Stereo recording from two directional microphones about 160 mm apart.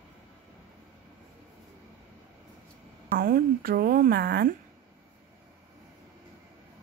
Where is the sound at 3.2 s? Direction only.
65° right (ahead or behind).